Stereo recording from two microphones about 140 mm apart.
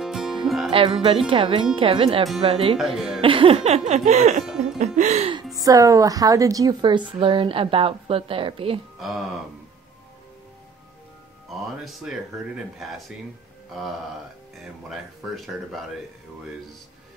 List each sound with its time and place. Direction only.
0.0 s music: centre (ahead or behind)
0.7 s speech: 40° right (ahead or behind)
2.4 s music: 45° right (ahead or behind)
2.8 s speech: centre (ahead or behind)
3.2 s music: 40° right (ahead or behind); by 5.3 s 55° right (ahead or behind)
5.3 s speech: 25° right (ahead or behind)
11.4 s speech: centre (ahead or behind)
14.6 s speech: centre (ahead or behind)